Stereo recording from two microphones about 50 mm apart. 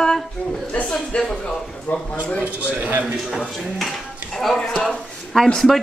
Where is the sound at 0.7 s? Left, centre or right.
Left.